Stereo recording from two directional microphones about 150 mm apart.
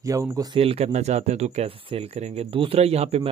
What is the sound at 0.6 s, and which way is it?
Speech, 40° right (ahead or behind).